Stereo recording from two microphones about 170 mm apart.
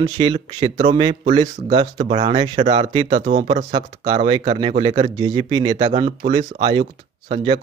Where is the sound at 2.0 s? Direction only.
40° right (ahead or behind).